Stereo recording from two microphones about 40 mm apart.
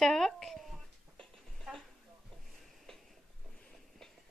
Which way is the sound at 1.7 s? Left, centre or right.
Centre.